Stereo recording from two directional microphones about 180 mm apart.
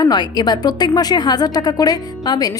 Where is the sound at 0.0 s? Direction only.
25° left (ahead or behind).